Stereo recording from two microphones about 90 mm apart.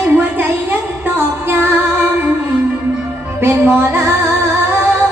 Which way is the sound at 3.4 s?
30° right (ahead or behind).